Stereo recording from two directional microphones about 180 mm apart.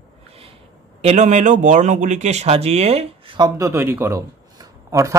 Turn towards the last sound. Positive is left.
turn(degrees=-15)  # may be behind; listen again after turning